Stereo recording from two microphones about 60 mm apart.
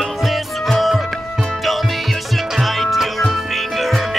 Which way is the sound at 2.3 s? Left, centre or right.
Centre.